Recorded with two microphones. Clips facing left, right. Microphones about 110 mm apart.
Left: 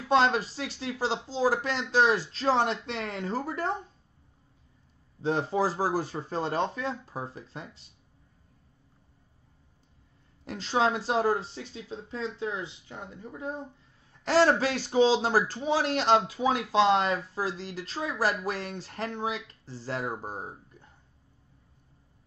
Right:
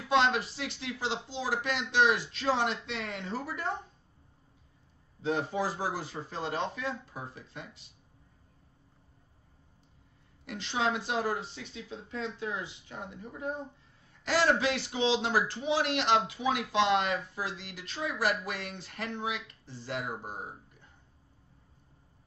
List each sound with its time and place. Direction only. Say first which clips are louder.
0.1 s speech: left 3 dB; 40° left (ahead or behind)
5.2 s speech: left 4 dB; 35° left (ahead or behind)
10.4 s speech: left 5 dB; 40° left (ahead or behind)
14.2 s speech: left 4 dB; 40° left (ahead or behind)